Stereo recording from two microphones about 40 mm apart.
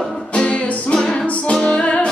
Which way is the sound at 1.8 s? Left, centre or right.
Left.